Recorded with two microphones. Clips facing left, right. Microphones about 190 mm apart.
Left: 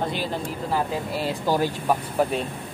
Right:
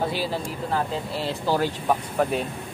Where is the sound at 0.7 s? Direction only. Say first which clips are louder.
Left 1 dB; 10° left (ahead or behind).